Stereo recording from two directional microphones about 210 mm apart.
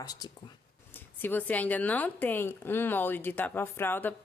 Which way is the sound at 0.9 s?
10° left (ahead or behind).